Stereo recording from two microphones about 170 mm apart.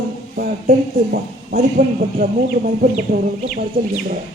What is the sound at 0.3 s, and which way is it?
Speech, 60° right (ahead or behind).